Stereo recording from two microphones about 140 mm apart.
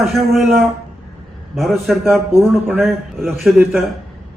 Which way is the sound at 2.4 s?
15° right (ahead or behind).